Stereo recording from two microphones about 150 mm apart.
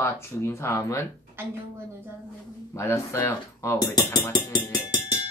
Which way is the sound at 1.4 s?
15° right (ahead or behind).